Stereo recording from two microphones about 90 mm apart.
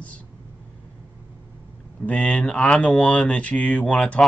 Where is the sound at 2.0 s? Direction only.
10° left (ahead or behind).